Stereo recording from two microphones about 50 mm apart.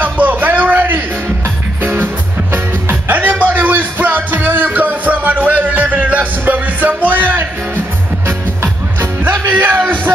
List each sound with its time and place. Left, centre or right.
0.0 s a sound: right
2.5 s music: right
9.0 s music: right